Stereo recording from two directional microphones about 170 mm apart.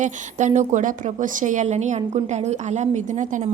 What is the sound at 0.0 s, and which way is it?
A woman's voice, 45° right (ahead or behind).